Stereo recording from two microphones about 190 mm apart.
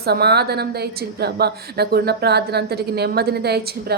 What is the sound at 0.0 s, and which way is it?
A woman's voice, 60° right (ahead or behind).